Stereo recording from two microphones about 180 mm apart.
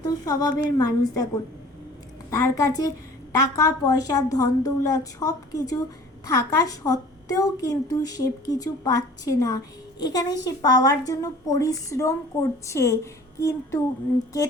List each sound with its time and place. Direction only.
0.0 s speech: 20° left (ahead or behind)
2.3 s speech: 20° left (ahead or behind)
13.4 s a sound: 15° left (ahead or behind)